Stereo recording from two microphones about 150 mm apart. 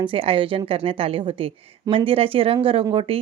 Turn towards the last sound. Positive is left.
turn(degrees=-40)  # may be behind; listen again after turning